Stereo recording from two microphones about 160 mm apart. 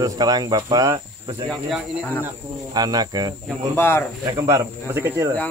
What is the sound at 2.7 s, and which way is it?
Speech, 25° right (ahead or behind).